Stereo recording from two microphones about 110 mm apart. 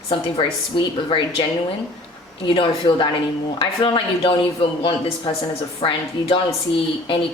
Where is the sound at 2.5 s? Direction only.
50° left (ahead or behind).